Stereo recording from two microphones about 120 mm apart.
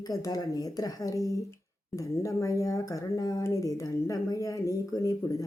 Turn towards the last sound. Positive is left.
turn(degrees=30)  # may be behind; listen again after turning